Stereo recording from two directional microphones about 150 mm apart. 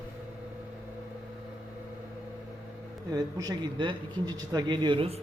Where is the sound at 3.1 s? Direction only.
25° right (ahead or behind).